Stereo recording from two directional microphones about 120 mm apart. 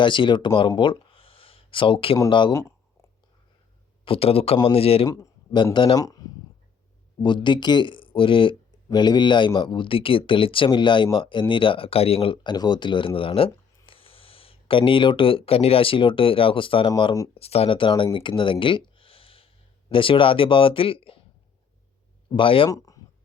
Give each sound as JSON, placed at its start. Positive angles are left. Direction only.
{"t": 0.0, "sound": "speech", "side_deg": 40}
{"t": 0.8, "sound": "a sound", "side_deg": 45}
{"t": 2.5, "sound": "a sound", "side_deg": 25}
{"t": 4.0, "sound": "speech", "side_deg": 50}
{"t": 5.0, "sound": "a man's voice", "side_deg": 25}
{"t": 5.7, "sound": "speech", "side_deg": 40}
{"t": 6.0, "sound": "speech", "side_deg": 30}
{"t": 7.2, "sound": "speech", "side_deg": 40}
{"t": 18.9, "sound": "a sound", "side_deg": 50}
{"t": 19.9, "sound": "speech", "side_deg": 45}
{"t": 22.4, "sound": "speech", "side_deg": 45}